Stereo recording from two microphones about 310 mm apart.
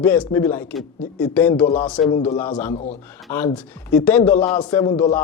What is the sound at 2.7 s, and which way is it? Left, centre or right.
Speech, left.